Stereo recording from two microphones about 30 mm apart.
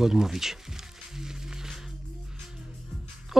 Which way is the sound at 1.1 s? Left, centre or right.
Centre.